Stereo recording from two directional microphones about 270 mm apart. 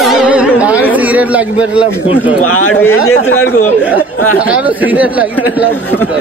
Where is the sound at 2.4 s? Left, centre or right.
Left.